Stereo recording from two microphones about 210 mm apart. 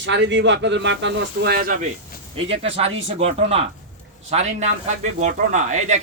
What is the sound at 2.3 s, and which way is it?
A man's voice, 25° right (ahead or behind).